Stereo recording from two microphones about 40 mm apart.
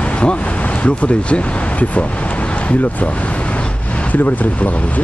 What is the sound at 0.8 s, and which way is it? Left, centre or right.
Speech, left.